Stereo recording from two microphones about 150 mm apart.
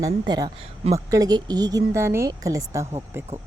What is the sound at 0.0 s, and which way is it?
Speech, 25° right (ahead or behind).